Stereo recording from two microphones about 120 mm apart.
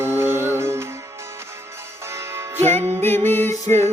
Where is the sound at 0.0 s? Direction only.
20° right (ahead or behind).